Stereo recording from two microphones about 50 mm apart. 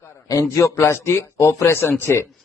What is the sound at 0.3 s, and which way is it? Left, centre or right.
A man's voice, left.